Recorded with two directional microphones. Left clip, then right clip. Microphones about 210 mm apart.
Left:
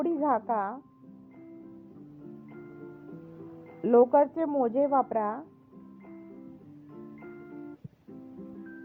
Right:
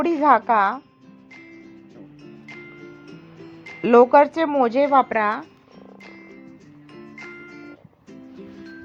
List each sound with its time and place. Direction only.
0.0 s a woman's voice: 30° right (ahead or behind)
3.8 s speech: 30° right (ahead or behind)